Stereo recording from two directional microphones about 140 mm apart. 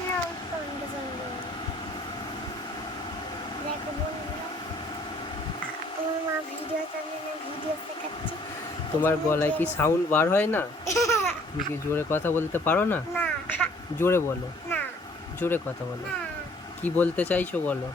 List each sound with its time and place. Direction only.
9.0 s speech: 15° left (ahead or behind)
15.4 s speech: 15° left (ahead or behind)
16.8 s speech: 10° left (ahead or behind)